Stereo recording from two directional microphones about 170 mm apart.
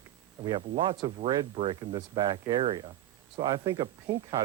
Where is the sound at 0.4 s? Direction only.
25° right (ahead or behind).